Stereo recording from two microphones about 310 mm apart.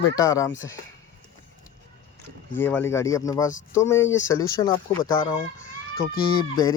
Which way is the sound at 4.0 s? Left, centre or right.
Left.